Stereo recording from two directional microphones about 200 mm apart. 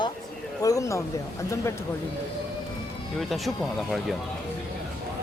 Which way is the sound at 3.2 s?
Centre (ahead or behind).